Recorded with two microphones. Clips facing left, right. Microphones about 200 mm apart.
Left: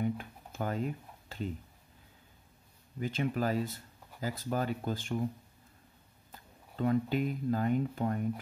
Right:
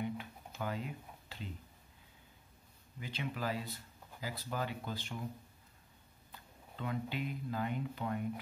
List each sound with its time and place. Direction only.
0.0 s a sound: 45° left (ahead or behind)
3.0 s speech: 45° left (ahead or behind)
6.3 s speech: 45° left (ahead or behind)